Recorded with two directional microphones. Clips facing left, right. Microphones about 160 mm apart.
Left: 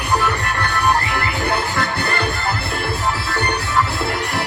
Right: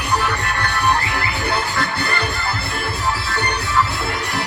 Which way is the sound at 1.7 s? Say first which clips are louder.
Left 1 dB; 50° left (ahead or behind).